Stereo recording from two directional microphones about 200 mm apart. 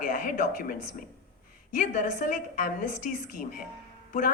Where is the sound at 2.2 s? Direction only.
45° left (ahead or behind).